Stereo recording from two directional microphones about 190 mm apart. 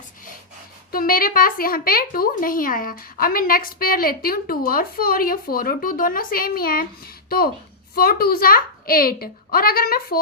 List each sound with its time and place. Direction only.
0.9 s speech: 50° left (ahead or behind)